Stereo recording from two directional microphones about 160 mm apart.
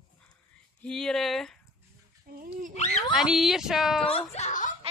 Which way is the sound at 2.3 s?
60° right (ahead or behind).